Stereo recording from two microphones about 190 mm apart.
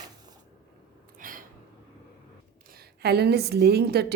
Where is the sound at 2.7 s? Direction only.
55° right (ahead or behind).